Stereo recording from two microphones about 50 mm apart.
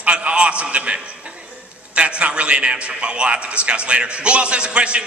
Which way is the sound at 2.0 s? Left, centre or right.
Right.